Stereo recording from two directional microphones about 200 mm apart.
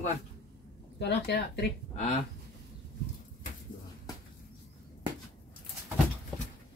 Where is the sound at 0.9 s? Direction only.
55° left (ahead or behind).